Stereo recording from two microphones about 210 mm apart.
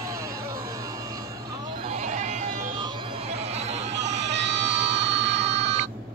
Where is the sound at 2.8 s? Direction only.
25° right (ahead or behind).